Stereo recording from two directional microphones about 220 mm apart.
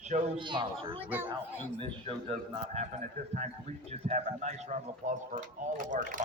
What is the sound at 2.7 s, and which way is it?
Speech, 30° right (ahead or behind).